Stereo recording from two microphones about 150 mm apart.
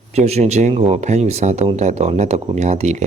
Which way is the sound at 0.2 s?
45° right (ahead or behind).